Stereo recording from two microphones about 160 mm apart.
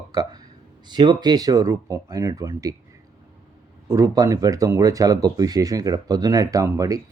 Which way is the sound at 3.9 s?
20° right (ahead or behind).